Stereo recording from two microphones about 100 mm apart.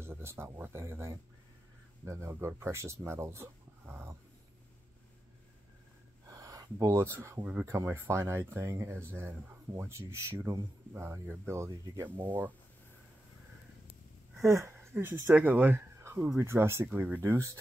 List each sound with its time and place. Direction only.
0.0 s speech: 25° right (ahead or behind)
6.2 s speech: 35° right (ahead or behind)
12.2 s speech: 20° right (ahead or behind)
14.4 s speech: 30° right (ahead or behind)